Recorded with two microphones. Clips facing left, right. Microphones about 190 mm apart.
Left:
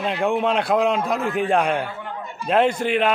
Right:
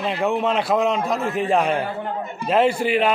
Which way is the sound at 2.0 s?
35° right (ahead or behind).